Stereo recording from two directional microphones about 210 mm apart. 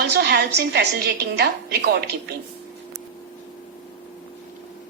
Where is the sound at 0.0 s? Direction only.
50° right (ahead or behind).